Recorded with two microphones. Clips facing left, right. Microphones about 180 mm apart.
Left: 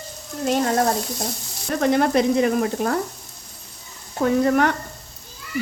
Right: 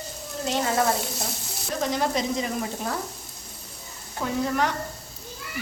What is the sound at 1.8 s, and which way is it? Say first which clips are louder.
Frying: left 8 dB; 60° left (ahead or behind).